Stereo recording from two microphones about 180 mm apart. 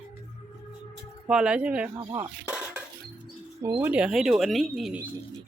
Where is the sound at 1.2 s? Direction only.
5° right (ahead or behind).